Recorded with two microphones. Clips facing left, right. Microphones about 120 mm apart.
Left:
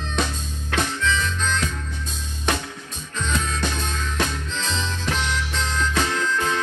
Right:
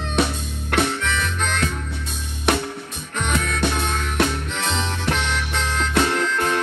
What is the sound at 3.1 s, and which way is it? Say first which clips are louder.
Music: right 2 dB; 65° right (ahead or behind).